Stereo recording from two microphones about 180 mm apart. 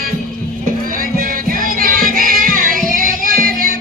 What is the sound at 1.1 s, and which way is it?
Music, 55° right (ahead or behind).